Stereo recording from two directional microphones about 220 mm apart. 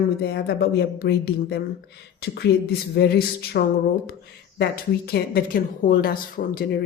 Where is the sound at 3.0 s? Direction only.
45° left (ahead or behind).